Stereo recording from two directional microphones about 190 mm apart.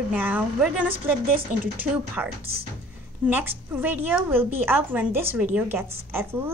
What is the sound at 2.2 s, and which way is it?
A child's voice, 10° right (ahead or behind).